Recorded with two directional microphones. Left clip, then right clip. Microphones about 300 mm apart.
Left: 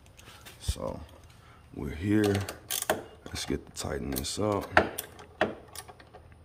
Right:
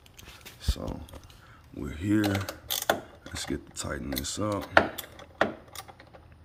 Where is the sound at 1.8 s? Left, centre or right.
Centre.